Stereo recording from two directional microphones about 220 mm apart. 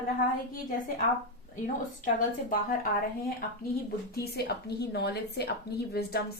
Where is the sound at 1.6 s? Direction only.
35° left (ahead or behind).